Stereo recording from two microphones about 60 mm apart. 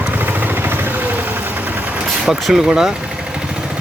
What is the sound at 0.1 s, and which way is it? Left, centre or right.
Vehicle, right.